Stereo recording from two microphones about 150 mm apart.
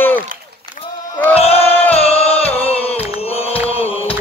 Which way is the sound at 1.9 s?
40° left (ahead or behind).